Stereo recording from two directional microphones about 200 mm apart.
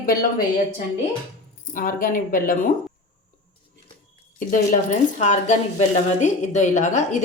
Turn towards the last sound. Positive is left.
turn(degrees=35)  # may be behind; listen again after turning